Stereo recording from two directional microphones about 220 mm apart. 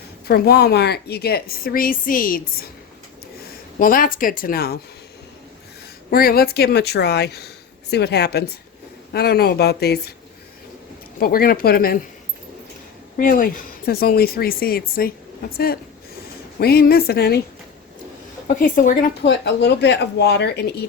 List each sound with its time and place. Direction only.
0.3 s speech: 45° left (ahead or behind)
3.8 s speech: 40° left (ahead or behind)
6.1 s speech: 45° left (ahead or behind)
11.2 s speech: 40° left (ahead or behind)
13.1 s speech: 40° left (ahead or behind)
18.4 s speech: 40° left (ahead or behind)
19.2 s speech: 50° left (ahead or behind)